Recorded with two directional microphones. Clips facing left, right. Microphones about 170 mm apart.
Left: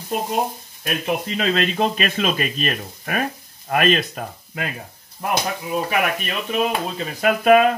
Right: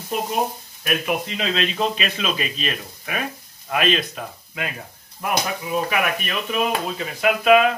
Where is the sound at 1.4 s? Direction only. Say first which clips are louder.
Left 5 dB; 50° left (ahead or behind).